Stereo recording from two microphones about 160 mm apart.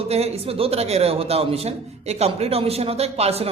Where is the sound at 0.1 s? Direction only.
40° right (ahead or behind).